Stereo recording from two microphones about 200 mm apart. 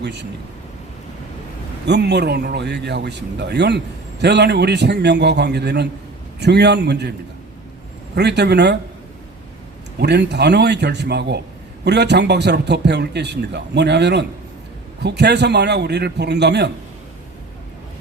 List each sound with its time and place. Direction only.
0.0 s a man's voice: 60° right (ahead or behind)
1.9 s a man's voice: 60° right (ahead or behind)
8.1 s a man's voice: 60° right (ahead or behind)
10.0 s a man's voice: 55° right (ahead or behind)